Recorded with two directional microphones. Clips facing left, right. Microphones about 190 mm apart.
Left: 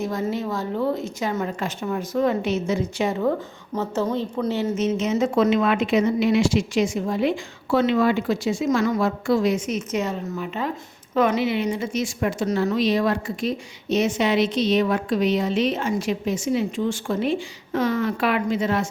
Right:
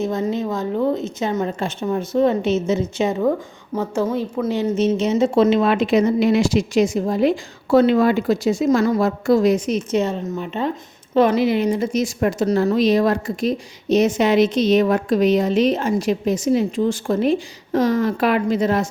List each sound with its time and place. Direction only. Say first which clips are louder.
0.0 s a woman's voice: right 4 dB; 20° right (ahead or behind)
3.7 s a woman's voice: right 3 dB; 10° right (ahead or behind)
4.8 s speech: right 5 dB; 30° right (ahead or behind)